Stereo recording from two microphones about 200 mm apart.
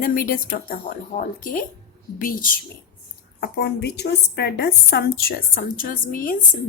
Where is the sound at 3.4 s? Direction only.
55° left (ahead or behind).